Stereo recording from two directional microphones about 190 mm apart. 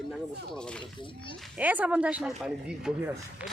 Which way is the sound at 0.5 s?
5° left (ahead or behind).